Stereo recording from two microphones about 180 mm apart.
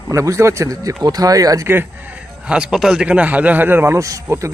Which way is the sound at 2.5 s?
5° right (ahead or behind).